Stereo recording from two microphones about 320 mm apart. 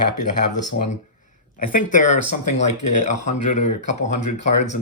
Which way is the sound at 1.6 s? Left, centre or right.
Left.